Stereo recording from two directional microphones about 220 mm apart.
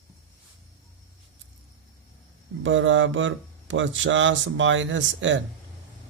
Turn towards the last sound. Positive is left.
turn(degrees=-60)  # may be behind; listen again after turning